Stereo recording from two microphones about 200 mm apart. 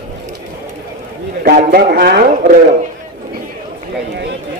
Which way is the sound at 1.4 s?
50° right (ahead or behind).